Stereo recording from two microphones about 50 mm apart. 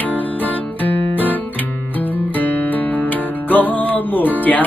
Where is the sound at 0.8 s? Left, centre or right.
Left.